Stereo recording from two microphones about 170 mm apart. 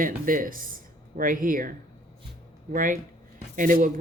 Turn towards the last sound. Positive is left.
turn(degrees=-50)  # may be behind; listen again after turning